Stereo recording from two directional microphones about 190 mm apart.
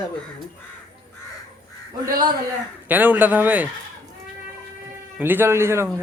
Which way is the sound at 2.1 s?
45° right (ahead or behind).